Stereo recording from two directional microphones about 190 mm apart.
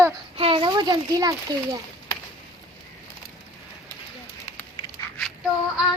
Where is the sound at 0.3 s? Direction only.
30° right (ahead or behind).